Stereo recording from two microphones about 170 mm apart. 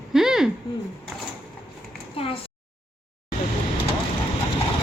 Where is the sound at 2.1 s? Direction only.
35° left (ahead or behind).